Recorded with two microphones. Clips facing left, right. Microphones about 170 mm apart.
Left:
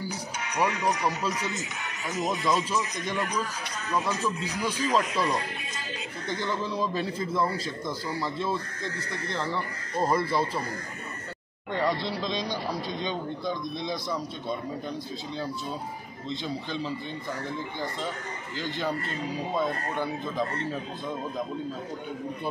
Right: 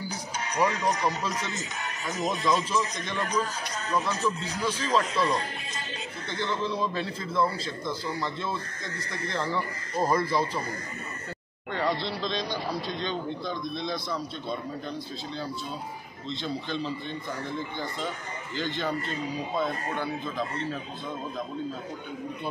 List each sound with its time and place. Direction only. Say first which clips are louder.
0.6 s speech: right 1 dB; 10° left (ahead or behind)
9.3 s speech: right 2 dB; centre (ahead or behind)
11.7 s speech: left 1 dB; 10° left (ahead or behind)
16.3 s speech: even; 10° left (ahead or behind)
18.6 s speech: right 1 dB; 10° left (ahead or behind)